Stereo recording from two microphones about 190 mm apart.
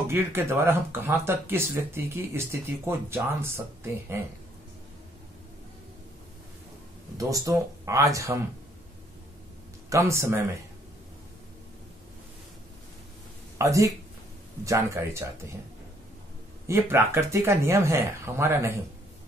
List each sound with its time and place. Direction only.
0.1 s speech: 10° right (ahead or behind)
7.2 s speech: 15° right (ahead or behind)
9.8 s speech: 15° right (ahead or behind)
13.6 s speech: 15° right (ahead or behind)
16.6 s speech: 10° right (ahead or behind)